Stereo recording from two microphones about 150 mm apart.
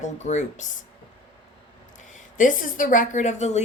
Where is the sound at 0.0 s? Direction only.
50° left (ahead or behind).